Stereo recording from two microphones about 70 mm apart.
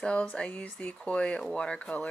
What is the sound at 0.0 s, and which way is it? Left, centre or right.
Speech, centre.